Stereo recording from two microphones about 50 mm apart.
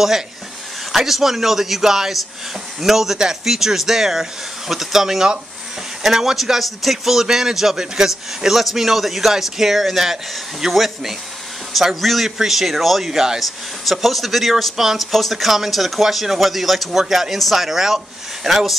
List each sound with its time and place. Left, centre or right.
0.9 s speech: centre